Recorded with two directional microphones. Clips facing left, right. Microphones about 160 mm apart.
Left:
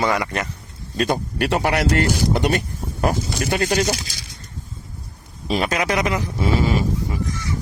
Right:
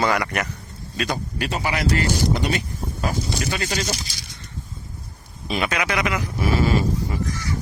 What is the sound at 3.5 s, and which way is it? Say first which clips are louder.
Speech: left 6 dB; 45° left (ahead or behind).